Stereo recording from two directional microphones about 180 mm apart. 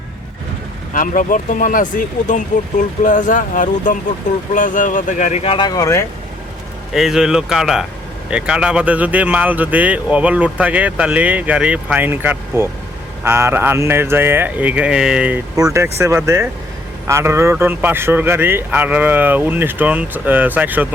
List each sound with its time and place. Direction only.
0.9 s speech: 50° left (ahead or behind); by 6.1 s 15° left (ahead or behind)
6.9 s speech: centre (ahead or behind)
15.5 s speech: 15° right (ahead or behind)